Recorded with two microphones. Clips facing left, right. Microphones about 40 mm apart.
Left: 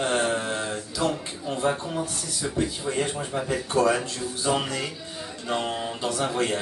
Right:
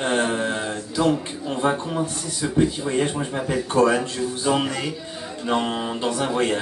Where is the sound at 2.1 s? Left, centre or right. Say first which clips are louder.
Right 4 dB; centre.